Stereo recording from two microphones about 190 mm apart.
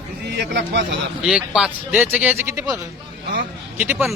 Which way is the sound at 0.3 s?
65° right (ahead or behind).